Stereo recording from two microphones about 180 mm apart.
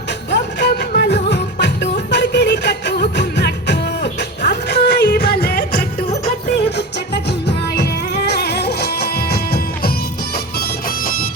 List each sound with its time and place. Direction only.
0.3 s music: 65° left (ahead or behind)
10.3 s bagpipes: 55° left (ahead or behind)